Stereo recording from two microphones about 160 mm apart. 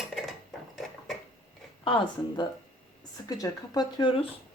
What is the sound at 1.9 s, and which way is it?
A woman's voice, 30° left (ahead or behind).